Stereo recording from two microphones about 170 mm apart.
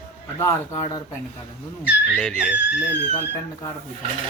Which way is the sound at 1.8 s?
5° left (ahead or behind).